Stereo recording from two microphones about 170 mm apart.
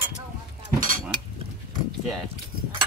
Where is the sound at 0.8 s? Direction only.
55° right (ahead or behind).